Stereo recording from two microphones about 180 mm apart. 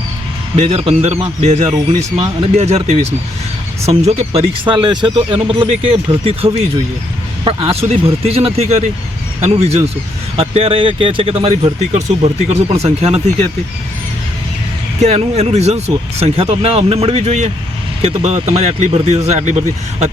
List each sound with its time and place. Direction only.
0.5 s speech: 35° right (ahead or behind)
15.0 s speech: 35° right (ahead or behind)